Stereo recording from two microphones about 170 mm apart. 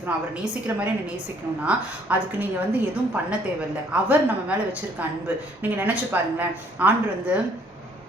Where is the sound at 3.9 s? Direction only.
5° right (ahead or behind).